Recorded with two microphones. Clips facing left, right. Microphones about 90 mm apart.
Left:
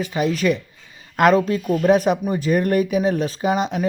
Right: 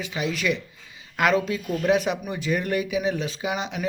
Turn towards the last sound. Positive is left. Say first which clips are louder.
# left 8 dB
turn(degrees=40)  # may be behind; listen again after turning